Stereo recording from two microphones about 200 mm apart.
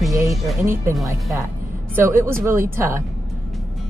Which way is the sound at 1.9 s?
10° right (ahead or behind).